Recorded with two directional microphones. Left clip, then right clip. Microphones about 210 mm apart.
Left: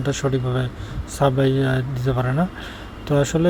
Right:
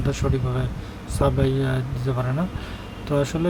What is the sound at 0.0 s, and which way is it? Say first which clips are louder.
Speech: left 3 dB; 15° left (ahead or behind).